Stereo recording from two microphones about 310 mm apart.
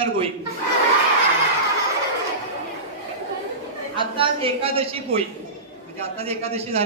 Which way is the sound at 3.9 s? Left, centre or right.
Centre.